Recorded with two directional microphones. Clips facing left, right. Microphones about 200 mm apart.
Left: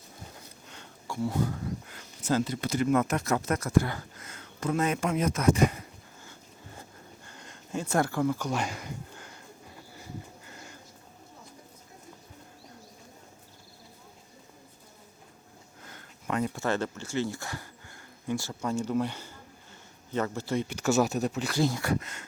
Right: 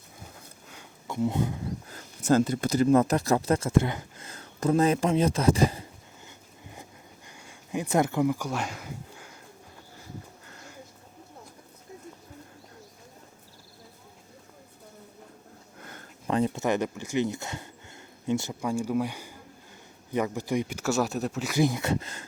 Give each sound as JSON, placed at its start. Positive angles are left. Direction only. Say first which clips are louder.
{"t": 0.3, "sound": "a sound", "louder": "even", "side_deg": -5}
{"t": 1.0, "sound": "speech", "louder": "right 2 dB", "side_deg": -20}
{"t": 1.9, "sound": "speech", "louder": "right 6 dB", "side_deg": -50}
{"t": 4.3, "sound": "speech", "louder": "right 5 dB", "side_deg": -35}
{"t": 6.2, "sound": "a sound", "louder": "right 1 dB", "side_deg": -15}
{"t": 16.2, "sound": "speech", "louder": "right 4 dB", "side_deg": -30}
{"t": 21.5, "sound": "speech", "louder": "right 4 dB", "side_deg": -15}